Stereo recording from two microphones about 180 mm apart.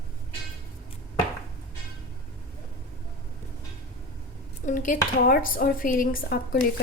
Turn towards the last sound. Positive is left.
turn(degrees=55)  # may be behind; listen again after turning